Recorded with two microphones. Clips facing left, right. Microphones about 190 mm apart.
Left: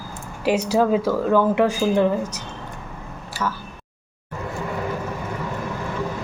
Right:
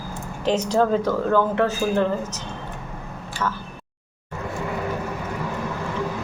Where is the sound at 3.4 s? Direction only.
5° left (ahead or behind).